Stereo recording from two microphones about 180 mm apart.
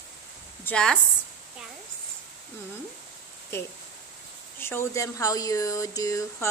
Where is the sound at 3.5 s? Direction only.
15° left (ahead or behind).